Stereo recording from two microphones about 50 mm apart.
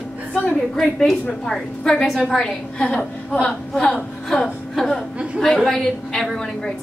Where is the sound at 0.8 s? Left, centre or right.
Centre.